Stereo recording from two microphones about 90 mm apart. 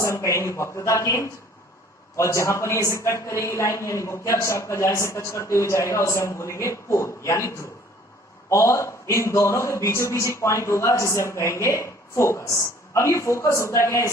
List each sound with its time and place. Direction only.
0.0 s a man's voice: 35° left (ahead or behind)